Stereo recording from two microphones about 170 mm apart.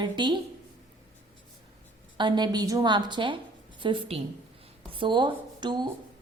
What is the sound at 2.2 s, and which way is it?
A woman's voice, 25° right (ahead or behind).